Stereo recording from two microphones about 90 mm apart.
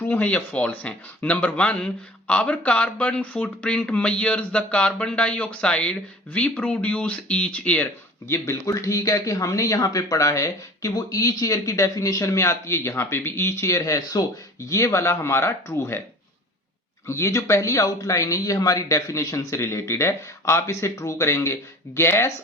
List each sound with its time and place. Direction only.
0.0 s speech: 20° left (ahead or behind)
8.3 s speech: 35° left (ahead or behind)
17.1 s speech: 35° left (ahead or behind)